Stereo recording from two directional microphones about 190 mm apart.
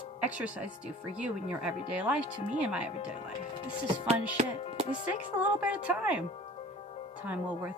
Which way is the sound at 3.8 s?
35° right (ahead or behind).